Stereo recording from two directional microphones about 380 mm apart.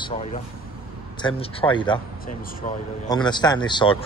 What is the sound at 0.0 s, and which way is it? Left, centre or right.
Speech, centre.